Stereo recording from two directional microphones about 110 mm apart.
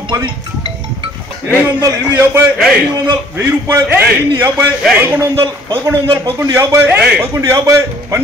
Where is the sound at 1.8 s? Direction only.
25° right (ahead or behind).